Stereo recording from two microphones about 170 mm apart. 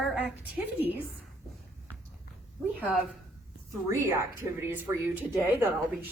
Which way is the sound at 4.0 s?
15° right (ahead or behind).